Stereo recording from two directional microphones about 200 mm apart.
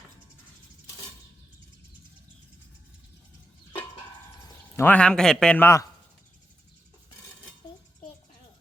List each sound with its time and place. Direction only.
4.8 s a man's voice: 5° left (ahead or behind)